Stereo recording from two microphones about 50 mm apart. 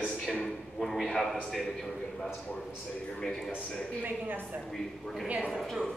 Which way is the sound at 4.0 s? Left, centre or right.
Right.